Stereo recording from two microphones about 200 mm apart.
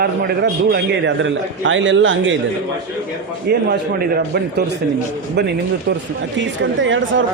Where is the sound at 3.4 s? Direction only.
50° right (ahead or behind).